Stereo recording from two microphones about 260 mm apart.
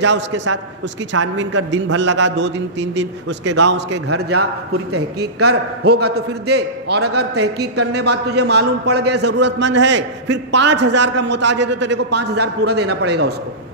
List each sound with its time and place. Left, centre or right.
0.0 s a man's voice: right
4.1 s a man's voice: right
5.5 s a man's voice: right